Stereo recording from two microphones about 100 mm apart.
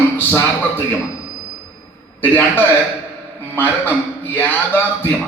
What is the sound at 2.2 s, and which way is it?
A man's voice, 20° left (ahead or behind).